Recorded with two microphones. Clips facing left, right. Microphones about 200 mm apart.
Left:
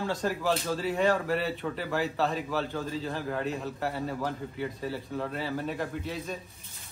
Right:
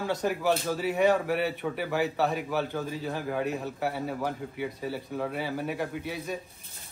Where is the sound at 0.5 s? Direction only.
5° right (ahead or behind).